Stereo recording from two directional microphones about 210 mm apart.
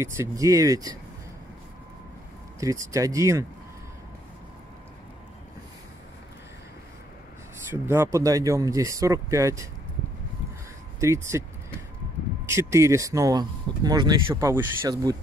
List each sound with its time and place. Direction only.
0.0 s speech: 15° right (ahead or behind)
2.6 s speech: 15° right (ahead or behind)
7.5 s speech: 10° right (ahead or behind)
11.0 s speech: 15° right (ahead or behind)
12.4 s speech: 15° right (ahead or behind)